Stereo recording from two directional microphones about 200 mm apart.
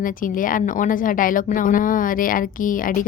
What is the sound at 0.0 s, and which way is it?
Speech, 45° left (ahead or behind).